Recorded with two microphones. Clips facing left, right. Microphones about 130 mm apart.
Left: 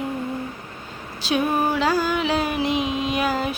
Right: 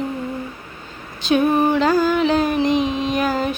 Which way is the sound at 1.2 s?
5° left (ahead or behind).